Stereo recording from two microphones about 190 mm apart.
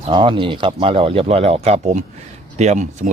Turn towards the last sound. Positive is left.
turn(degrees=-35)  # may be behind; listen again after turning